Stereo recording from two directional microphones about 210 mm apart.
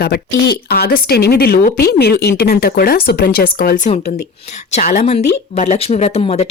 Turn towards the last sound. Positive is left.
turn(degrees=30)  # may be behind; listen again after turning